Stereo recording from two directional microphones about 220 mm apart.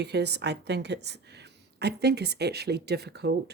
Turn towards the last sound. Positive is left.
turn(degrees=-50)  # may be behind; listen again after turning